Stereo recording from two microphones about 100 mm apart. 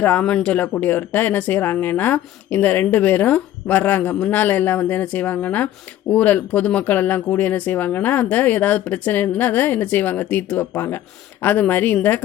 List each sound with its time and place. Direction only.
0.0 s speech: 15° left (ahead or behind)